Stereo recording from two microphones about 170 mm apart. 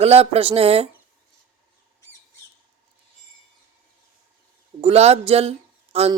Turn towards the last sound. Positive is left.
turn(degrees=-35)  # may be behind; listen again after turning